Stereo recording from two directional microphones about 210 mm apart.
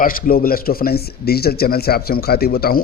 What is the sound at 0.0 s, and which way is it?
A man's voice, 40° left (ahead or behind).